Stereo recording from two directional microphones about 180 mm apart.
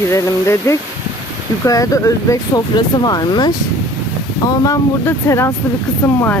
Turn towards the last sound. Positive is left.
turn(degrees=10)  # may be behind; listen again after turning